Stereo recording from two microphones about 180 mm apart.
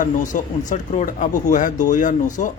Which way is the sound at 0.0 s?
45° left (ahead or behind).